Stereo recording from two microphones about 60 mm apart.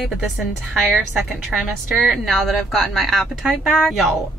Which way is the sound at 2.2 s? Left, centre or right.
Centre.